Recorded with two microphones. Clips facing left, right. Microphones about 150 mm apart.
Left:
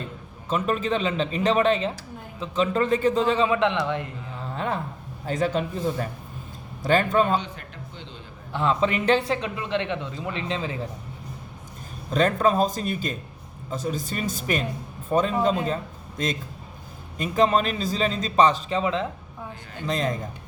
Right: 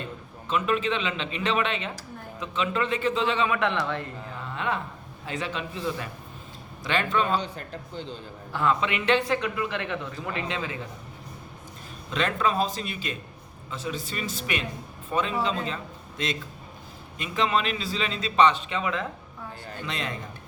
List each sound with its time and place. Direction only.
0.4 s a man's voice: 40° left (ahead or behind)
3.5 s speech: 20° left (ahead or behind)
4.4 s a sound: 40° left (ahead or behind)
5.2 s a man's voice: 40° left (ahead or behind)
7.4 s a man's voice: 35° right (ahead or behind)
8.8 s speech: 40° left (ahead or behind)
12.1 s a man's voice: 40° left (ahead or behind)
19.8 s a man's voice: 40° left (ahead or behind)